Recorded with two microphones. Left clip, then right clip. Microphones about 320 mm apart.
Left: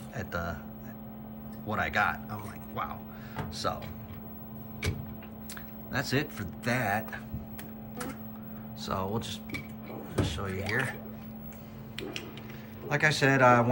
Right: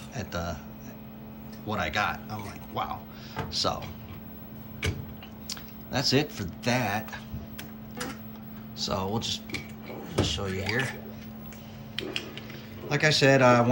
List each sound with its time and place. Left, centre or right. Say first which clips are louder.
0.2 s speech: right 1 dB; centre
1.6 s speech: even; centre
5.5 s speech: right 4 dB; centre
8.8 s speech: right 3 dB; centre
12.9 s speech: right 4 dB; centre